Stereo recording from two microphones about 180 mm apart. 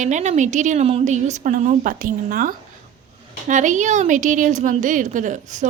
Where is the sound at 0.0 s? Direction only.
40° right (ahead or behind).